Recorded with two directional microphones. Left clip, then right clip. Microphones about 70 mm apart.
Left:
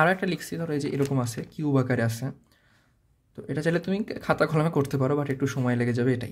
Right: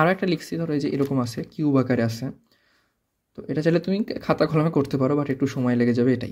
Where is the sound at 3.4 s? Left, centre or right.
Right.